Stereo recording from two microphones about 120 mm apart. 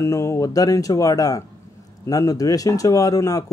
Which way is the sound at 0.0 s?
25° left (ahead or behind).